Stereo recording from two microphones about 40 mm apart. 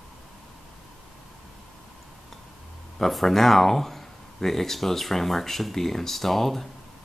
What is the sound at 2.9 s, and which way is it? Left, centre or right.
Speech, centre.